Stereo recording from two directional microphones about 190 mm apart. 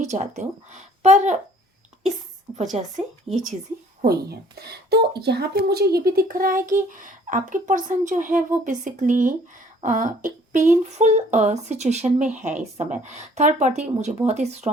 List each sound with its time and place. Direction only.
0.0 s speech: 40° right (ahead or behind)
2.8 s speech: 35° right (ahead or behind)
4.0 s speech: 55° right (ahead or behind); by 14.7 s 35° right (ahead or behind)